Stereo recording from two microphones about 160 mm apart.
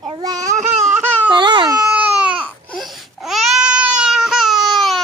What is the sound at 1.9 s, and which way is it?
Baby cry, 10° right (ahead or behind).